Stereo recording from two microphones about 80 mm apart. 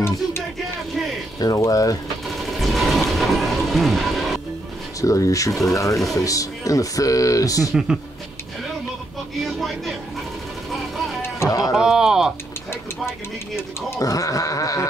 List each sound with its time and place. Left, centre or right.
1.4 s speech: left
2.2 s a sound: centre
5.0 s speech: left
9.4 s music: centre
10.7 s vehicle: centre
11.4 s music: left
11.7 s speech: centre
13.8 s speech: left